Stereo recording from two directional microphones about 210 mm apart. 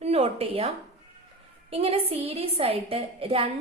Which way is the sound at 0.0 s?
30° right (ahead or behind).